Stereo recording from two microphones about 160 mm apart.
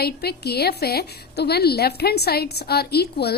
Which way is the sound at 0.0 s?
85° left.